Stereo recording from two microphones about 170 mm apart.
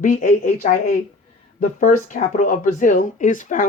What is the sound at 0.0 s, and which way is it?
Speech, 50° left (ahead or behind).